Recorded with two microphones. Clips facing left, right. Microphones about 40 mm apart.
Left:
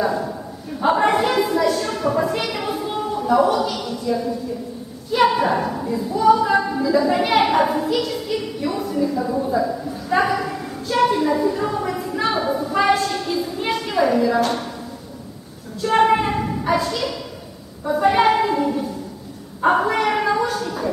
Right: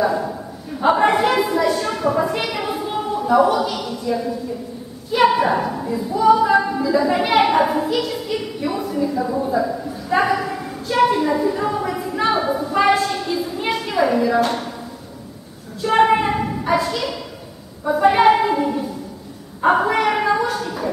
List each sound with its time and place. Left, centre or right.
0.0 s a woman's voice: centre
15.8 s a woman's voice: centre